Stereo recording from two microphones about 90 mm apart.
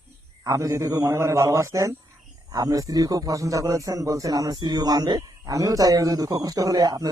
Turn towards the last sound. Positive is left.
turn(degrees=-45)  # may be behind; listen again after turning